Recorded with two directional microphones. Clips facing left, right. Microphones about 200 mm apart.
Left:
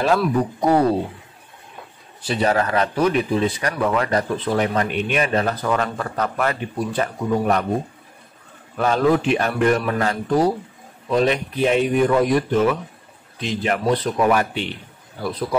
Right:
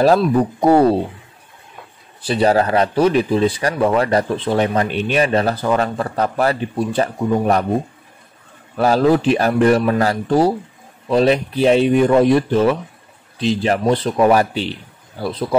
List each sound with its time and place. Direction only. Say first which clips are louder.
0.2 s speech: right 4 dB; 30° right (ahead or behind)
2.2 s a man's voice: right 5 dB; 30° right (ahead or behind)
8.7 s a man's voice: right 4 dB; 35° right (ahead or behind)